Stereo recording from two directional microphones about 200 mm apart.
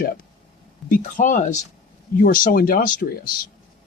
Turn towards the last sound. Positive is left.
turn(degrees=45)  # may be behind; listen again after turning